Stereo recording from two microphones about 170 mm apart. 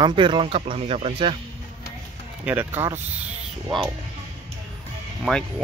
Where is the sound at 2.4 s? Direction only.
10° right (ahead or behind).